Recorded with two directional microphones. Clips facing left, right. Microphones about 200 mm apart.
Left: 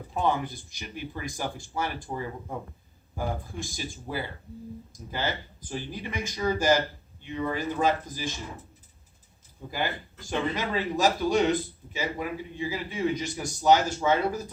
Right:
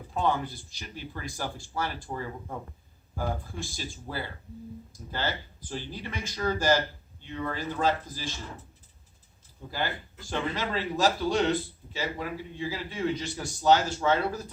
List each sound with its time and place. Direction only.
0.1 s a man's voice: 15° left (ahead or behind)
9.6 s a man's voice: 15° left (ahead or behind)